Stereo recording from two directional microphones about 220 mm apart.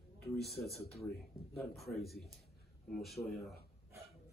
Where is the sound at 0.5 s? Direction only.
45° left (ahead or behind).